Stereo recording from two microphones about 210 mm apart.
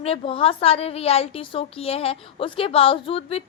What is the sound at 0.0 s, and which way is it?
A woman's voice, 25° left (ahead or behind).